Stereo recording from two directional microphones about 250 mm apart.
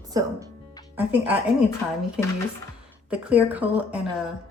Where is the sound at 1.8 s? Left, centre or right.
Centre.